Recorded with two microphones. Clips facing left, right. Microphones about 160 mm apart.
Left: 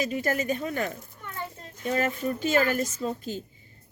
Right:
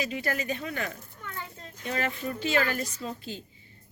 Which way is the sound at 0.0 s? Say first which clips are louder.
Left 4 dB; 45° left (ahead or behind).